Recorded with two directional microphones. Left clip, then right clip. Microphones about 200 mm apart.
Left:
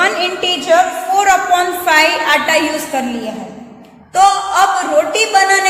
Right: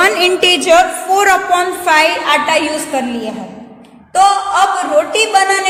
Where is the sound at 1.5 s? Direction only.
15° right (ahead or behind).